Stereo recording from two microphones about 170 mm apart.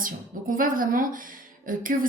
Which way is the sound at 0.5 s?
55° right (ahead or behind).